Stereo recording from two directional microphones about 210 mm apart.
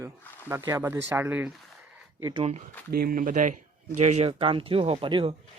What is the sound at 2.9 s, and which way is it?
Speech, 45° right (ahead or behind).